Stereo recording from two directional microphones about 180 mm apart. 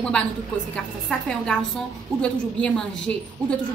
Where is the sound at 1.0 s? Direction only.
5° left (ahead or behind).